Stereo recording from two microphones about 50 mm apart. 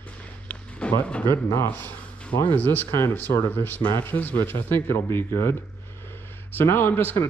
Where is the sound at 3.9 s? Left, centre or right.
Left.